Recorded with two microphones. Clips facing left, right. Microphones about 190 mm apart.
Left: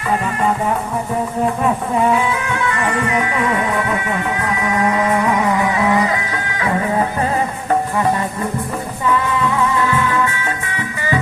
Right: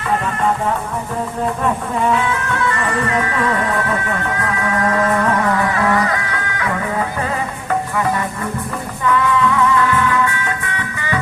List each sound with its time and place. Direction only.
1.6 s music: 5° left (ahead or behind)